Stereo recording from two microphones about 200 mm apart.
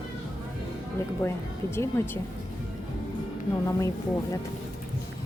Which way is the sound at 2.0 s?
15° left (ahead or behind).